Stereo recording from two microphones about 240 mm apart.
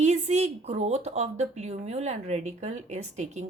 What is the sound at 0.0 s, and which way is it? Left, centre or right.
A woman's voice, right.